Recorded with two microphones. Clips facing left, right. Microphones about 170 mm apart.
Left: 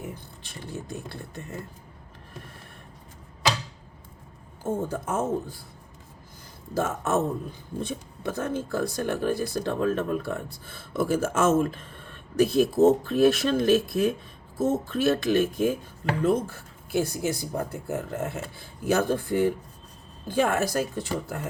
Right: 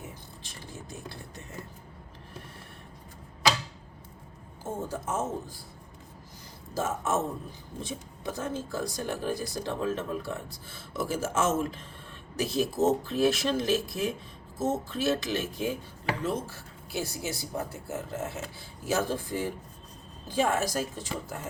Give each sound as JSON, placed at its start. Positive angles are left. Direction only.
{"t": 0.1, "sound": "speech", "side_deg": 60}
{"t": 4.6, "sound": "speech", "side_deg": 55}
{"t": 6.7, "sound": "speech", "side_deg": 60}